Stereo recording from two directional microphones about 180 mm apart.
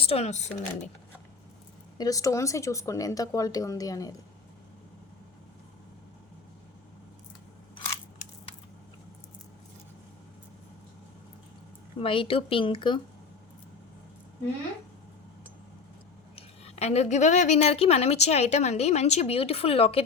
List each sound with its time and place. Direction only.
0.0 s a woman's voice: 35° left (ahead or behind)
2.0 s speech: 20° left (ahead or behind)
11.9 s speech: 30° left (ahead or behind)
16.3 s a woman's voice: 35° left (ahead or behind)